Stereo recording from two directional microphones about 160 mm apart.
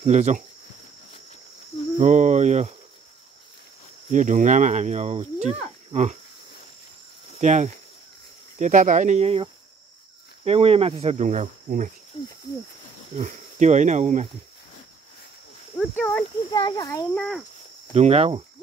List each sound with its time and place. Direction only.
0.0 s speech: 45° right (ahead or behind)
2.0 s speech: 50° right (ahead or behind)
4.1 s speech: 50° right (ahead or behind)
7.3 s speech: 45° right (ahead or behind)
12.1 s cricket: 30° left (ahead or behind)
13.2 s speech: 50° right (ahead or behind)
15.9 s speech: 10° left (ahead or behind)
16.5 s a child's voice: 25° left (ahead or behind)
17.1 s speech: 5° left (ahead or behind)
17.9 s speech: 40° right (ahead or behind)